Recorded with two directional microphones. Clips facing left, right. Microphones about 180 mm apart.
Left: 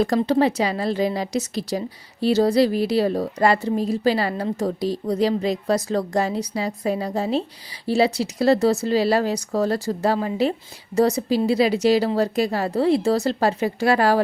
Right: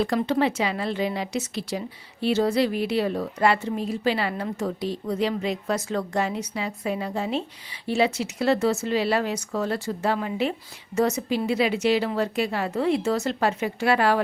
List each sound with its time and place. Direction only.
0.2 s a woman's voice: 35° left (ahead or behind)